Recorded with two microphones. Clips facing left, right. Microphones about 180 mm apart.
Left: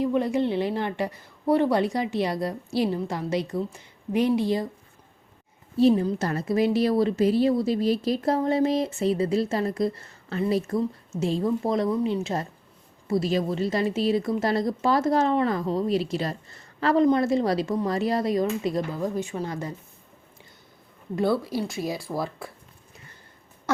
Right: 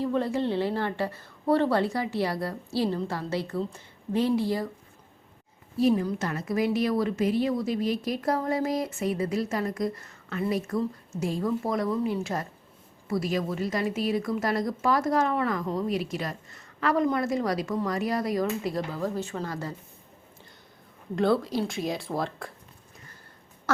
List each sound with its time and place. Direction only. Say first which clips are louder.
0.0 s a woman's voice: left 3 dB; 15° left (ahead or behind)
5.7 s a woman's voice: left 4 dB; 25° left (ahead or behind)
21.2 s speech: even; 5° left (ahead or behind)